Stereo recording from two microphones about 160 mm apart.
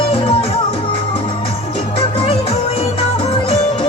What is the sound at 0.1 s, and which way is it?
Music, 35° left (ahead or behind).